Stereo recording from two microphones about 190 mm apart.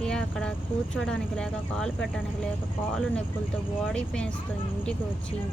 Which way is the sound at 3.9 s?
5° left (ahead or behind).